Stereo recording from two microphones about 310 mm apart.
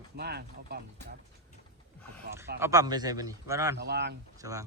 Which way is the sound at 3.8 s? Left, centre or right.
Right.